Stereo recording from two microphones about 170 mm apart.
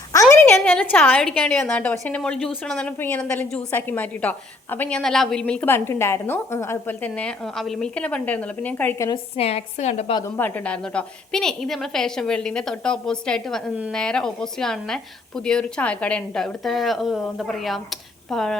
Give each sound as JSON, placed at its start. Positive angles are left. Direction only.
{"t": 0.1, "sound": "a woman's voice", "side_deg": 15}
{"t": 9.0, "sound": "a woman's voice", "side_deg": 35}
{"t": 10.2, "sound": "a woman's voice", "side_deg": 15}